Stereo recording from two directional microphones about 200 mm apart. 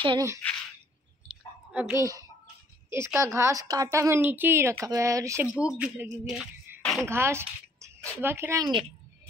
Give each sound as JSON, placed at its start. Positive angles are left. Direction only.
{"t": 0.0, "sound": "speech", "side_deg": -20}
{"t": 1.7, "sound": "a woman's voice", "side_deg": -5}
{"t": 6.2, "sound": "a sound", "side_deg": 0}
{"t": 7.1, "sound": "a woman's voice", "side_deg": -10}